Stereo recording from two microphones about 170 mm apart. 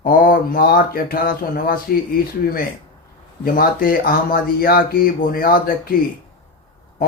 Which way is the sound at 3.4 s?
60° left (ahead or behind).